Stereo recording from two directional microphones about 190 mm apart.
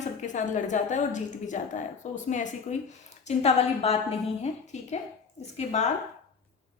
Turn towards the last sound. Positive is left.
turn(degrees=35)  # may be behind; listen again after turning